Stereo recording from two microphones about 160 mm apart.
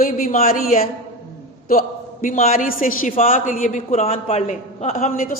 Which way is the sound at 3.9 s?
40° left (ahead or behind).